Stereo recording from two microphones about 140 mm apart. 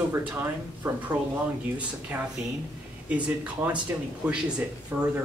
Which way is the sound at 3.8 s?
10° right (ahead or behind).